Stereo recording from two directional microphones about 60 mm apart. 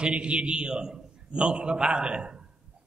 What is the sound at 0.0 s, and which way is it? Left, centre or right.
A man's voice, centre.